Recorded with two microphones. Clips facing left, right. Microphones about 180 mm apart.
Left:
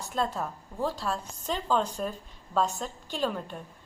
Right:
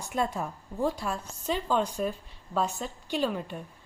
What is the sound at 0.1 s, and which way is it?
A woman's voice, 10° right (ahead or behind).